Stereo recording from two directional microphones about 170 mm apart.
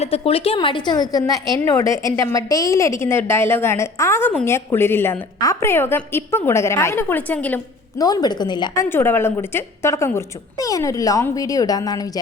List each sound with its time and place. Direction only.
0.0 s a woman's voice: 35° left (ahead or behind); by 7.6 s 10° left (ahead or behind)
7.9 s a woman's voice: 20° left (ahead or behind)